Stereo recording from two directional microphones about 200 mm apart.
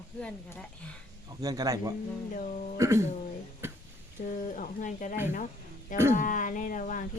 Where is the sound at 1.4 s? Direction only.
20° right (ahead or behind).